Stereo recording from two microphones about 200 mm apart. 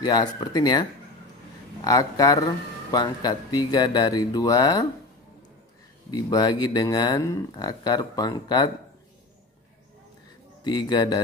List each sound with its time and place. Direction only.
0.0 s speech: 20° left (ahead or behind)
1.9 s speech: 20° left (ahead or behind)
6.0 s speech: 20° left (ahead or behind)
10.6 s speech: 20° left (ahead or behind)